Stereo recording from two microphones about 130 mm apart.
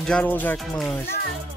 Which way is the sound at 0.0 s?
10° left (ahead or behind).